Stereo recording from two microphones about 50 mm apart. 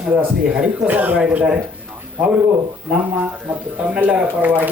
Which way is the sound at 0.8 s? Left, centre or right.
Right.